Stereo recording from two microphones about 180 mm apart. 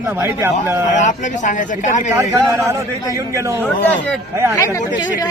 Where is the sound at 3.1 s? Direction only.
15° right (ahead or behind).